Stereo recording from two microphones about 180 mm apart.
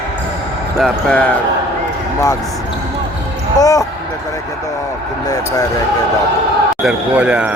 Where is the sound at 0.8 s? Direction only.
5° left (ahead or behind).